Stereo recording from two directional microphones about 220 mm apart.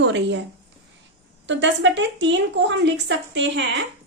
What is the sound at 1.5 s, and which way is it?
A woman's voice, 55° right (ahead or behind).